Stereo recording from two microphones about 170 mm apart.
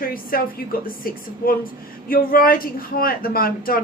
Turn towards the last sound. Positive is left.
turn(degrees=60)  # may be behind; listen again after turning